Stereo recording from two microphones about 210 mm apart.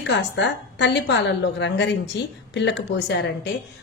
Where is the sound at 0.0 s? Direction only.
60° left (ahead or behind).